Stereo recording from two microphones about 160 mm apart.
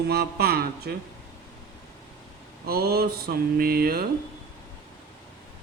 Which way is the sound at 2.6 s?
75° right (ahead or behind).